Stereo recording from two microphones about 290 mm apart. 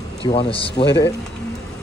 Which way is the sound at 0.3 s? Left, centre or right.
Centre.